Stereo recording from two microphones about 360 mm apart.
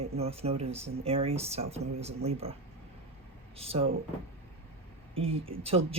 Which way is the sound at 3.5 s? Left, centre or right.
Centre.